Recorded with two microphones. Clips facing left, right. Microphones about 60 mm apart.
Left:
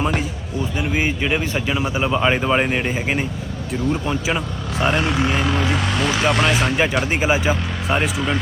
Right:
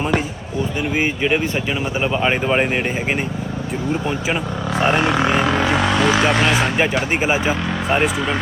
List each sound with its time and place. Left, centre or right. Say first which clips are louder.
1.2 s speech: right 2 dB; centre
5.0 s speech: right 3 dB; right
7.1 s speech: even; right